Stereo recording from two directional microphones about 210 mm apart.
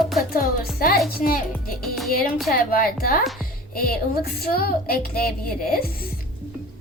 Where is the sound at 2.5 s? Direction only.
45° left (ahead or behind).